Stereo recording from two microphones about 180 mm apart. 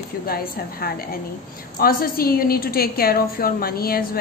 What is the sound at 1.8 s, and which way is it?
A woman's voice, 55° left (ahead or behind).